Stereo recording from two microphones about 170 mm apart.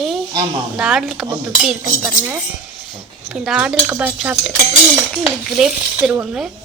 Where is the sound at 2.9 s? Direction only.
Centre (ahead or behind).